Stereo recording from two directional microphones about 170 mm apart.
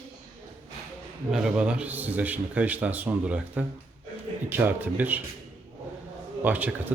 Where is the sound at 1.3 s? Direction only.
5° right (ahead or behind).